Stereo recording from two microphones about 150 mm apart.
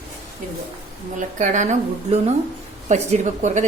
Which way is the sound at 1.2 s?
55° right (ahead or behind).